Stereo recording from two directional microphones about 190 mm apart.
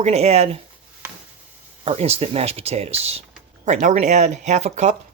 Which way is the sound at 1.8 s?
35° right (ahead or behind).